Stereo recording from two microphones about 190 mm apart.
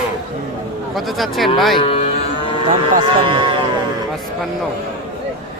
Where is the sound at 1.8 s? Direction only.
30° left (ahead or behind).